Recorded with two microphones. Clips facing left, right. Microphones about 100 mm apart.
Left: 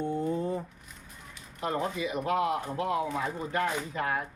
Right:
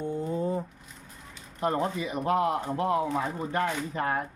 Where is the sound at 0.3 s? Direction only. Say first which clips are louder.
Right 2 dB; 25° right (ahead or behind).